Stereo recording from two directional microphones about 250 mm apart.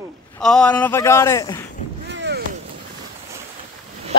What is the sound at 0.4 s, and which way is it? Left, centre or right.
A man's voice, centre.